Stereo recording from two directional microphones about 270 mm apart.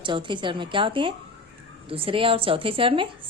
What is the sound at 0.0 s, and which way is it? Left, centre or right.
A woman's voice, centre.